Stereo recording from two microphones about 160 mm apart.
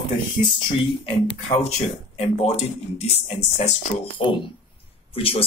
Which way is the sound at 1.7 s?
40° left (ahead or behind).